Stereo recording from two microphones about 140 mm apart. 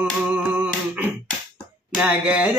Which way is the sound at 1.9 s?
10° right (ahead or behind).